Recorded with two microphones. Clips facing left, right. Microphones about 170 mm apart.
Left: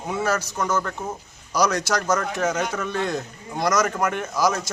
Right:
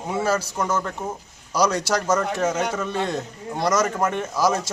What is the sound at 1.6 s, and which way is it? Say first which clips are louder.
Speech: right 1 dB; 30° right (ahead or behind).